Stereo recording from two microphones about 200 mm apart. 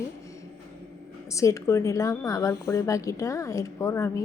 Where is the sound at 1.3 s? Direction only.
15° left (ahead or behind).